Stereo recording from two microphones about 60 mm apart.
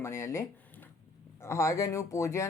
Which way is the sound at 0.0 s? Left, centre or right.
Left.